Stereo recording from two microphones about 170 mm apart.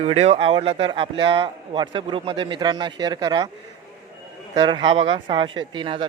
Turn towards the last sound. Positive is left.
turn(degrees=-30)  # may be behind; listen again after turning